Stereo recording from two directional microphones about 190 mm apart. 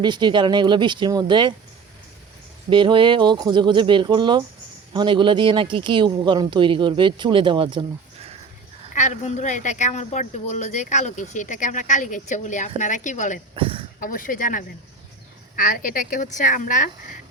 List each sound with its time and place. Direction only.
0.0 s speech: 25° right (ahead or behind)
2.6 s speech: 25° right (ahead or behind)
9.0 s a woman's voice: 40° left (ahead or behind)
13.6 s a sound: 30° right (ahead or behind)
14.0 s speech: 45° left (ahead or behind)